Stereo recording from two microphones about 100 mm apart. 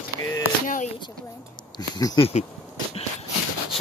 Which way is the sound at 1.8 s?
40° left (ahead or behind).